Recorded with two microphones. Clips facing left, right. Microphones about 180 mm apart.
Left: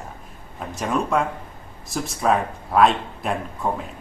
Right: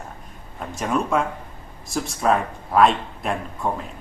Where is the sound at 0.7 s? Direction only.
Centre (ahead or behind).